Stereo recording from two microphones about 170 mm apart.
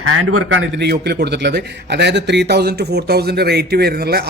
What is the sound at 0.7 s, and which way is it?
A man's voice, 80° right.